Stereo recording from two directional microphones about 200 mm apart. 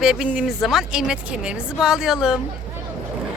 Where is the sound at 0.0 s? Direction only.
Centre (ahead or behind).